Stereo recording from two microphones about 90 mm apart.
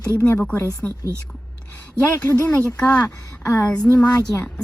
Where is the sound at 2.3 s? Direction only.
30° left (ahead or behind).